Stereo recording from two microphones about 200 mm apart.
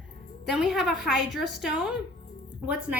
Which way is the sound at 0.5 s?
Centre (ahead or behind).